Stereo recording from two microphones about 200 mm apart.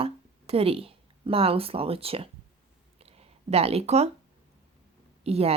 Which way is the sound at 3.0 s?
30° right (ahead or behind).